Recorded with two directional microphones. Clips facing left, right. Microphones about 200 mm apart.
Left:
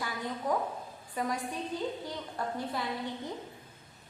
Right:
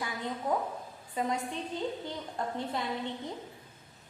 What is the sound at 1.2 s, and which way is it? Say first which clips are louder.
Speech: right 1 dB; 20° right (ahead or behind).